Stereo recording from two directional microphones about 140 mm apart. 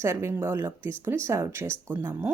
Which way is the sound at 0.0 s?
20° right (ahead or behind).